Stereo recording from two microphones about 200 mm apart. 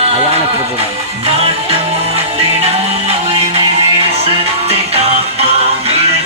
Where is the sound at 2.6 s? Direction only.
30° right (ahead or behind).